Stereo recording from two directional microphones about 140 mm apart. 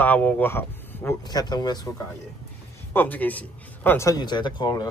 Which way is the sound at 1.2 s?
30° left (ahead or behind).